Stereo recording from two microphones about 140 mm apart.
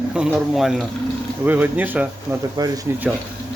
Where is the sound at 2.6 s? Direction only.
30° right (ahead or behind).